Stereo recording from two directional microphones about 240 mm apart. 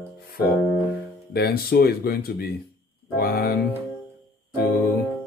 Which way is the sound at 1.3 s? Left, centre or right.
Left.